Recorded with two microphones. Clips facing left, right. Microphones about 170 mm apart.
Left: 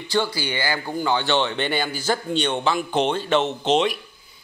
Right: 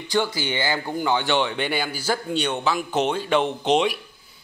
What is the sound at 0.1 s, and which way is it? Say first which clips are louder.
A man's voice: even; 20° right (ahead or behind).